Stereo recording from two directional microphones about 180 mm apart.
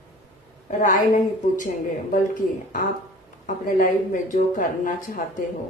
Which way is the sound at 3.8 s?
45° left (ahead or behind).